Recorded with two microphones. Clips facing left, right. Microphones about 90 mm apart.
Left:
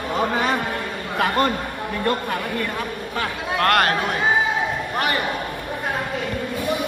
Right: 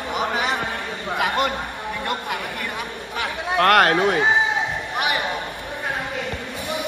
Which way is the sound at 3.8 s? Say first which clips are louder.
Right 3 dB; 30° right (ahead or behind).